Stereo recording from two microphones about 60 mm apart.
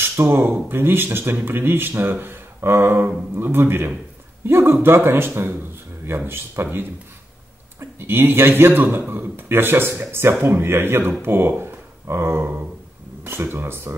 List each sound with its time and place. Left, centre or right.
0.0 s speech: right